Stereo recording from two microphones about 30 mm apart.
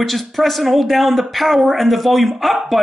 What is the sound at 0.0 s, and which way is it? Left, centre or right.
Speech, centre.